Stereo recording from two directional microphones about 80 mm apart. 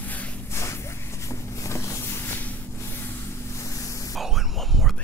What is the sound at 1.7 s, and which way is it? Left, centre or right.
Vehicle, left.